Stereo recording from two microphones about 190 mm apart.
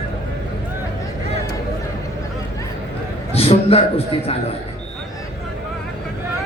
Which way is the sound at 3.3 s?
30° left (ahead or behind).